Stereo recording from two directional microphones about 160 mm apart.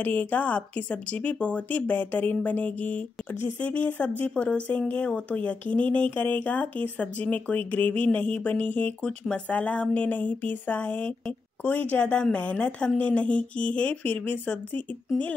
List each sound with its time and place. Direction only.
0.0 s speech: 10° left (ahead or behind)